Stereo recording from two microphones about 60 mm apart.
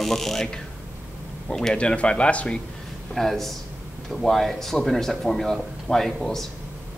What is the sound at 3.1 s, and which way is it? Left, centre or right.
Speech, centre.